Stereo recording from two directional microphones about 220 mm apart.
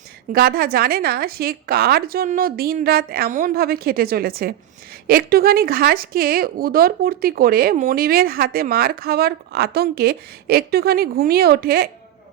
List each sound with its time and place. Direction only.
0.3 s speech: 45° right (ahead or behind)